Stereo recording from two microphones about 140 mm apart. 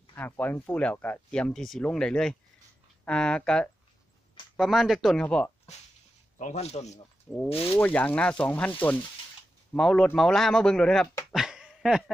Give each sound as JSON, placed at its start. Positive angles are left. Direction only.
{"t": 0.1, "sound": "speech", "side_deg": 15}
{"t": 6.3, "sound": "a man's voice", "side_deg": 55}
{"t": 7.3, "sound": "speech", "side_deg": 0}
{"t": 7.6, "sound": "speech", "side_deg": 15}
{"t": 11.3, "sound": "dog", "side_deg": -5}